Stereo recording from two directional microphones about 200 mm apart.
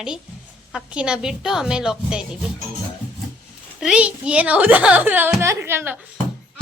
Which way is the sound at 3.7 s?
5° right (ahead or behind).